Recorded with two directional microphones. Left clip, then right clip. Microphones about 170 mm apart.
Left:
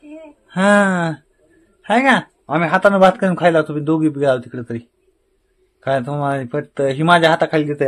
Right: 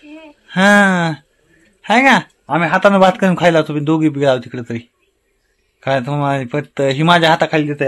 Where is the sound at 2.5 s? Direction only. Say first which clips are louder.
Right 2 dB; centre (ahead or behind).